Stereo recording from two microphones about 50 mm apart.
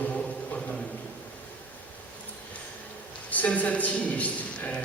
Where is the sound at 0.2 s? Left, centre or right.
Centre.